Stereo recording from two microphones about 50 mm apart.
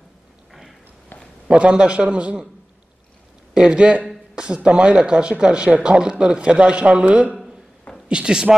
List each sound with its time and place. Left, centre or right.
0.5 s a sound: centre
1.5 s speech: centre
3.5 s speech: centre